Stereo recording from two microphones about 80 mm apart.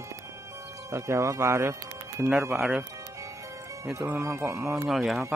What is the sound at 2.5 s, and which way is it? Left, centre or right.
Speech, centre.